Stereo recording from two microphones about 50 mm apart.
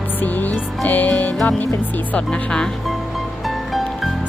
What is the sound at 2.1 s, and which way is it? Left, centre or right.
Music, centre.